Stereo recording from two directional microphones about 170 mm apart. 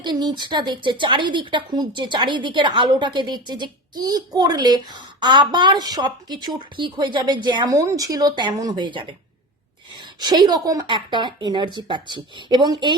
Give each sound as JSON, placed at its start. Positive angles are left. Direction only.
{"t": 0.0, "sound": "a woman's voice", "side_deg": -25}
{"t": 10.2, "sound": "a woman's voice", "side_deg": -25}